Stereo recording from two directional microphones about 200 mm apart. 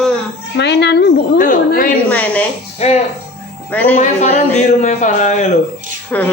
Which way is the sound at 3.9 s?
35° left (ahead or behind).